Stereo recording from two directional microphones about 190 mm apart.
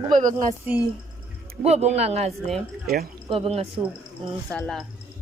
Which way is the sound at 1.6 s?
35° right (ahead or behind).